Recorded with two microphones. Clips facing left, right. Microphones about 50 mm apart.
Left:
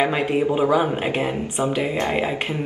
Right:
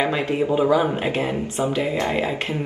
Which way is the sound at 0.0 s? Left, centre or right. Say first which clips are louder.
Left 1 dB; centre.